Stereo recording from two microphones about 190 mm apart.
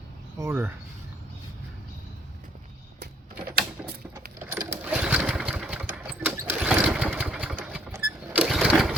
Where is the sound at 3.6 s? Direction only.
50° right (ahead or behind).